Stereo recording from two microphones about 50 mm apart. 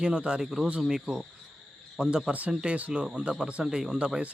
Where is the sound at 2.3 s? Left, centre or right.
Right.